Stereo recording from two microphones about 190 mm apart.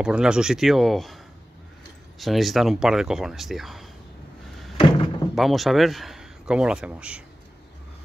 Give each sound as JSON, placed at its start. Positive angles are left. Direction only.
{"t": 0.0, "sound": "speech", "side_deg": -5}
{"t": 4.7, "sound": "a sound", "side_deg": 25}
{"t": 5.3, "sound": "a man's voice", "side_deg": 0}